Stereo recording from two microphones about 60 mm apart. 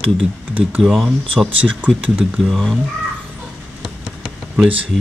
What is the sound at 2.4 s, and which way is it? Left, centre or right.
Speech, centre.